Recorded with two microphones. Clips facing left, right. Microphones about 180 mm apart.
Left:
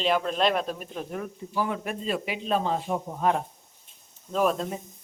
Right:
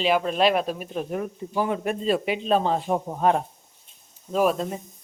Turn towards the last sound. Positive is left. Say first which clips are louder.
# right 3 dB
turn(degrees=-5)  # may be behind; listen again after turning